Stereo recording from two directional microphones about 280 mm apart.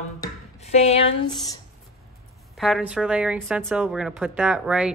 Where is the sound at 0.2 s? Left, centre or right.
Left.